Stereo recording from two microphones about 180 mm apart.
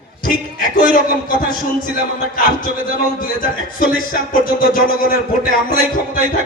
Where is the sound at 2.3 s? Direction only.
50° left (ahead or behind).